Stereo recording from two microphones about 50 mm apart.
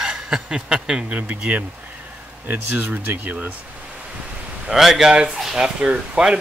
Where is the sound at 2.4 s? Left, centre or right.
Right.